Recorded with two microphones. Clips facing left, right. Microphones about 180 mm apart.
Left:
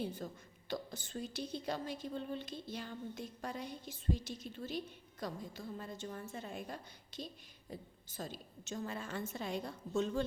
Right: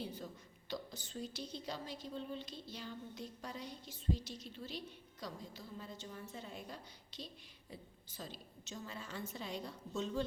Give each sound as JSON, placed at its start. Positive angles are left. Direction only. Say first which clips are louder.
{"t": 0.0, "sound": "a woman's voice", "louder": "left 4 dB", "side_deg": 50}